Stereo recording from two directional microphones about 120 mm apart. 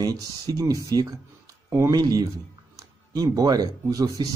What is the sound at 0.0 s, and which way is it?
Speech, 30° right (ahead or behind).